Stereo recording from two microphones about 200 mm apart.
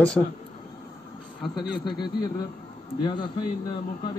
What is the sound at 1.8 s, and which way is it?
Speech, 20° left (ahead or behind).